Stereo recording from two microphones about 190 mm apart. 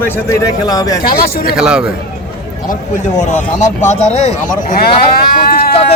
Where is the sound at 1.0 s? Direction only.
50° left (ahead or behind).